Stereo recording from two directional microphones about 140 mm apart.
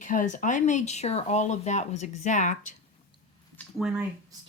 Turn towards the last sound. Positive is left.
turn(degrees=0)  # may be behind; listen again after turning